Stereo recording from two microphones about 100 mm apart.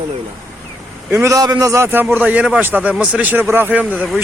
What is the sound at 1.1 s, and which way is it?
A man's voice, 30° right (ahead or behind).